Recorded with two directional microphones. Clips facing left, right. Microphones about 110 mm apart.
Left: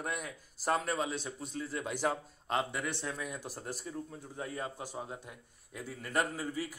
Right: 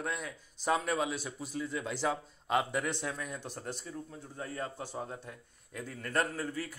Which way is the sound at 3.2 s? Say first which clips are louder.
Even; 5° left (ahead or behind).